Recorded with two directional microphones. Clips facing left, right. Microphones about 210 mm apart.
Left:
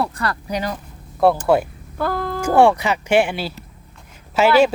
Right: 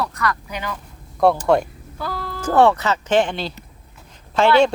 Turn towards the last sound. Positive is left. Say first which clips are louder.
# left 1 dB
turn(degrees=5)  # may be behind; listen again after turning